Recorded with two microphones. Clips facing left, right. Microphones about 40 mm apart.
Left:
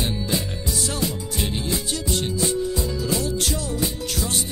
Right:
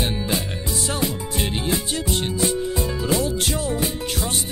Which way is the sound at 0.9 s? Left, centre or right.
Right.